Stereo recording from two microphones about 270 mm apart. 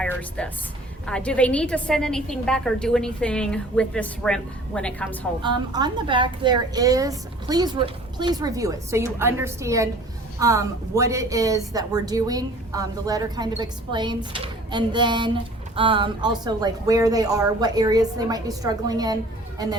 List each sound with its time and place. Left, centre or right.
0.0 s a woman's voice: centre
5.4 s speech: centre